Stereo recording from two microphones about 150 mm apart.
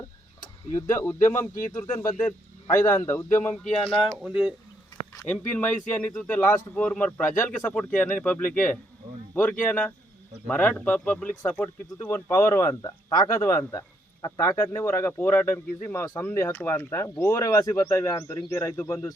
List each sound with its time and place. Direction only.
0.7 s speech: 15° left (ahead or behind)
3.5 s speech: 5° left (ahead or behind)
5.2 s speech: 10° left (ahead or behind)